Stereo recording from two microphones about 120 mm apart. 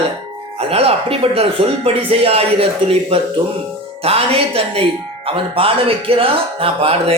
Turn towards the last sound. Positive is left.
turn(degrees=-50)  # may be behind; listen again after turning